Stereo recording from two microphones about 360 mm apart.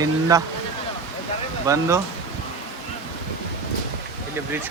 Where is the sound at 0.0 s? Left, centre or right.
Centre.